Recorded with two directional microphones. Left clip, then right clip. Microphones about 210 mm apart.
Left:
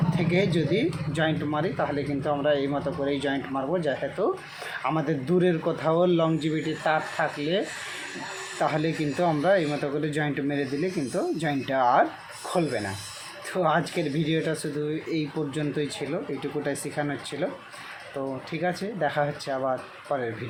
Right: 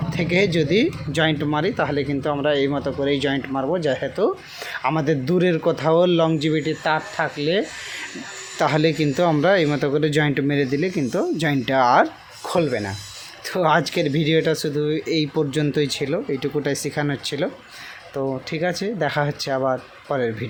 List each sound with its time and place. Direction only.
0.1 s speech: 40° right (ahead or behind)